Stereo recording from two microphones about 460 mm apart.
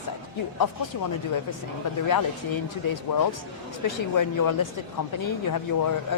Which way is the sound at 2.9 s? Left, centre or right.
Left.